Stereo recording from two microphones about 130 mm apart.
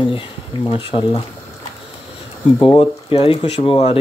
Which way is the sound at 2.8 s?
45° left (ahead or behind).